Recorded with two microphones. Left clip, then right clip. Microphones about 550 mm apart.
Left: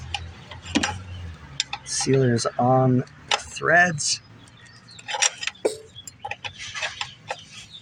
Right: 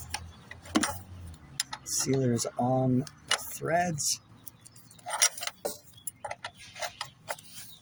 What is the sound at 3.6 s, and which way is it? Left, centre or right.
Speech, right.